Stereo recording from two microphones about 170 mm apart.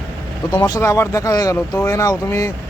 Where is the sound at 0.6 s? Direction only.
20° left (ahead or behind).